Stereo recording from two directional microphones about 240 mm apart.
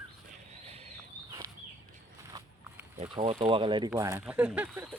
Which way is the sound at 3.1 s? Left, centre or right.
Right.